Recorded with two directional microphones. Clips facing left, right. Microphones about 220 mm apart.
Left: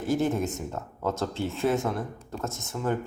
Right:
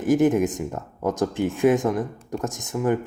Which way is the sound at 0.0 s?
15° right (ahead or behind).